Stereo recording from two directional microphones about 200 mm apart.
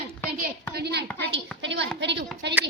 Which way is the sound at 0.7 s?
55° right (ahead or behind).